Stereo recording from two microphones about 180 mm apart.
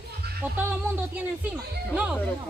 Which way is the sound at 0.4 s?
10° right (ahead or behind).